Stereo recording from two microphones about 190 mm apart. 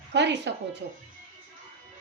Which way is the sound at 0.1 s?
65° right (ahead or behind).